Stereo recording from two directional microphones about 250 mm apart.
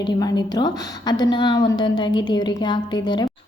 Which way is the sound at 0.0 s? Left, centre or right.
Centre.